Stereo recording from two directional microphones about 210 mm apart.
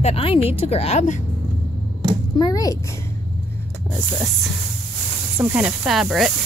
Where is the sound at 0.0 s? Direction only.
25° left (ahead or behind).